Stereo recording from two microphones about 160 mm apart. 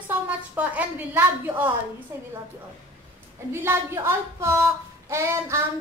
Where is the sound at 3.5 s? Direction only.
15° right (ahead or behind).